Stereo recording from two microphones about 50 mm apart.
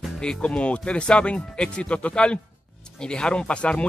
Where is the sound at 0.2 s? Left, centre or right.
Centre.